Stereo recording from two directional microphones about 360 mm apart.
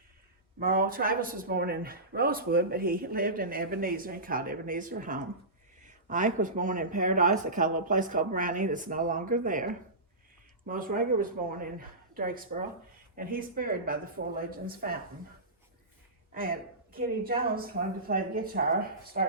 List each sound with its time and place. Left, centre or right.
0.6 s speech: right
10.7 s speech: right
16.3 s speech: right